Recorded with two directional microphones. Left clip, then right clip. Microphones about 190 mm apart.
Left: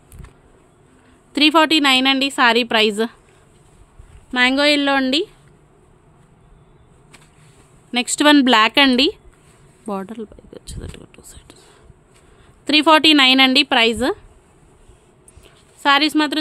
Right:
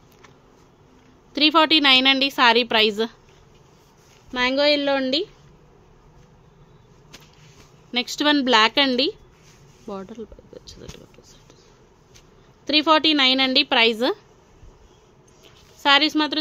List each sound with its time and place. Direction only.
1.3 s a woman's voice: 30° left (ahead or behind)
4.3 s speech: 40° left (ahead or behind)
7.9 s speech: 40° left (ahead or behind)
9.8 s whispering: 40° left (ahead or behind)
12.6 s speech: 40° left (ahead or behind); by 14.2 s 25° left (ahead or behind)
15.4 s a sound: 25° left (ahead or behind)